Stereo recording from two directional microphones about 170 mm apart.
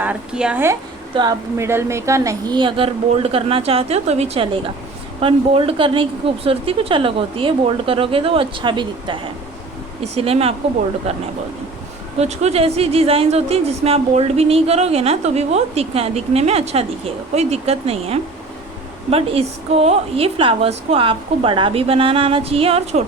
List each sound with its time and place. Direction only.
0.0 s a woman's voice: 5° right (ahead or behind)
1.1 s speech: 25° right (ahead or behind)